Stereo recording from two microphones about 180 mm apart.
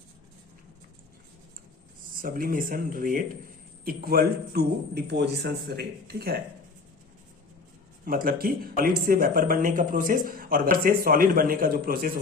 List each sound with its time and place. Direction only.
2.2 s a man's voice: 50° right (ahead or behind)
8.0 s speech: 55° right (ahead or behind)